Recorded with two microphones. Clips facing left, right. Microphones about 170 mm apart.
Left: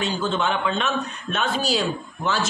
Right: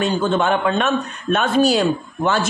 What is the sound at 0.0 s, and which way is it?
A man's voice, 50° right (ahead or behind).